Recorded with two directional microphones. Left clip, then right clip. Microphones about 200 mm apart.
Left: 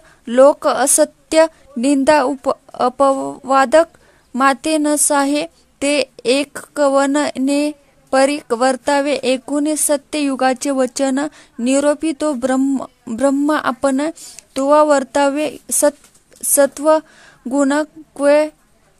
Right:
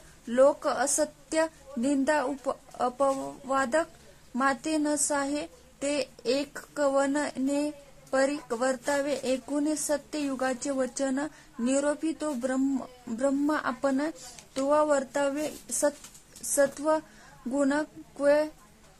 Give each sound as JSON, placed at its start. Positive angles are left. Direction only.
{"t": 0.3, "sound": "speech", "side_deg": 40}